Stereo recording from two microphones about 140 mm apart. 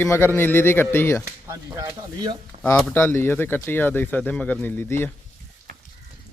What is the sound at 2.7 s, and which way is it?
Speech, 15° left (ahead or behind).